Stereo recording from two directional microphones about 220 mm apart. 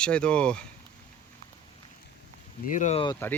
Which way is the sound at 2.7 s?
35° left (ahead or behind).